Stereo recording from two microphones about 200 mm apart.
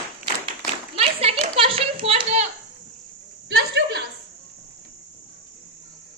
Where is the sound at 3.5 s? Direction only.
55° right (ahead or behind).